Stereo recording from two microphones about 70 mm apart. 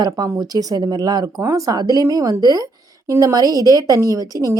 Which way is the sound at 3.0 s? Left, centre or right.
Right.